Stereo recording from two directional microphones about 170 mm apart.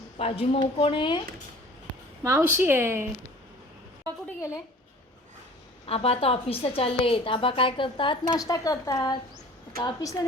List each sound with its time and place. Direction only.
0.2 s a woman's voice: 35° left (ahead or behind)
2.2 s speech: 10° right (ahead or behind)
5.8 s a woman's voice: 35° left (ahead or behind)